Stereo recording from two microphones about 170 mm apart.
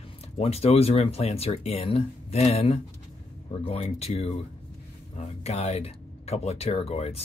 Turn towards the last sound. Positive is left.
turn(degrees=35)  # may be behind; listen again after turning